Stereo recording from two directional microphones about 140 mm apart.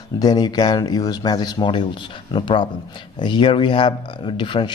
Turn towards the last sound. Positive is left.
turn(degrees=35)  # may be behind; listen again after turning